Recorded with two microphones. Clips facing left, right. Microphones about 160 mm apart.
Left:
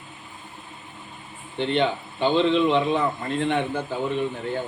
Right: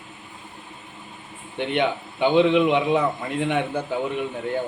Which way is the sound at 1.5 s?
15° right (ahead or behind).